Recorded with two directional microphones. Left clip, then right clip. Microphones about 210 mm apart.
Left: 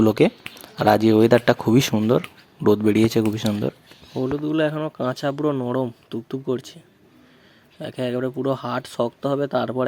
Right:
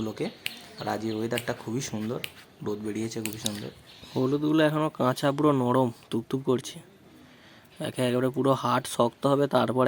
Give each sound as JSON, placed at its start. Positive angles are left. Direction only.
{"t": 0.0, "sound": "speech", "side_deg": 40}
{"t": 4.1, "sound": "speech", "side_deg": 0}
{"t": 7.8, "sound": "speech", "side_deg": 0}